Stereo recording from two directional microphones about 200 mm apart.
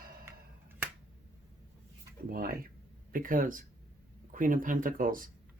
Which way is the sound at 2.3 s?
45° right (ahead or behind).